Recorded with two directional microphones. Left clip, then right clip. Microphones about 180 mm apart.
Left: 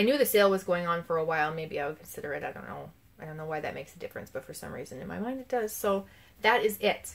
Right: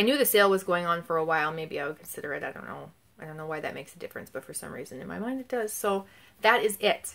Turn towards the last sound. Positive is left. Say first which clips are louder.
# right 2 dB
turn(degrees=-30)  # may be behind; listen again after turning